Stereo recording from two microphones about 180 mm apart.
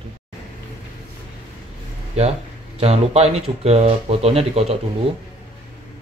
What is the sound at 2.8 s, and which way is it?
Speech, 35° right (ahead or behind).